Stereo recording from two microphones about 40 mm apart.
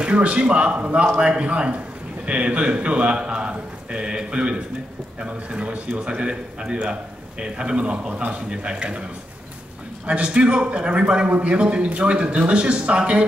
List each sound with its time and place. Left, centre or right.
0.0 s a man's voice: right
10.0 s a man's voice: right